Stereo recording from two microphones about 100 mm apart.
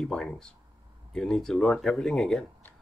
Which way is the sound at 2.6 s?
20° left (ahead or behind).